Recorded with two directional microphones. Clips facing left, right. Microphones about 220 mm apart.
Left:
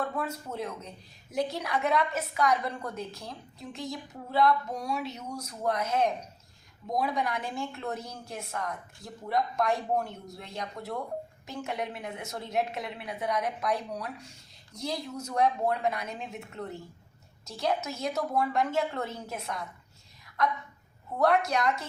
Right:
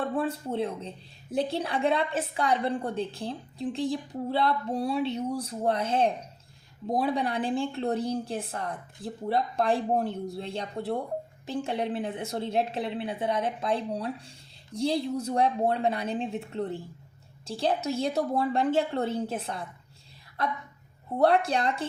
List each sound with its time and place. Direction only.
0.0 s speech: 30° right (ahead or behind)